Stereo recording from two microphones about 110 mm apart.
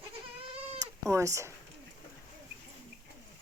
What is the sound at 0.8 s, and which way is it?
Cat, 25° right (ahead or behind).